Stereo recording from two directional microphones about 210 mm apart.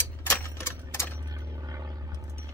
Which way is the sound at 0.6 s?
10° left (ahead or behind).